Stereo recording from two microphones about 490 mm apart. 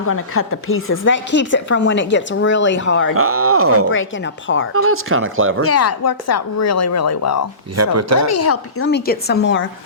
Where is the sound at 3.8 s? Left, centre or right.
Left.